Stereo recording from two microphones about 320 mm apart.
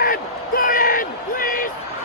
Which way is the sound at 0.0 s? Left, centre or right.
Left.